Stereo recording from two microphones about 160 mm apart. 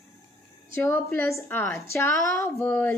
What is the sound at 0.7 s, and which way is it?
Female singing, 15° left (ahead or behind).